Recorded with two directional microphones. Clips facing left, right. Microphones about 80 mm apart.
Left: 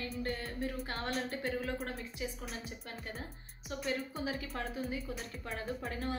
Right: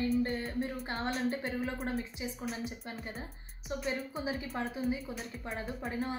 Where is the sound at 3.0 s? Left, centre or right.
Centre.